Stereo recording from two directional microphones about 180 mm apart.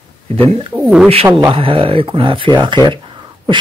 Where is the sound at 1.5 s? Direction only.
30° right (ahead or behind).